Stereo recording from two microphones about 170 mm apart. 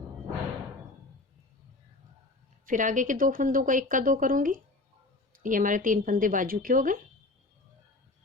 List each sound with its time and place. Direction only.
2.6 s speech: 50° right (ahead or behind)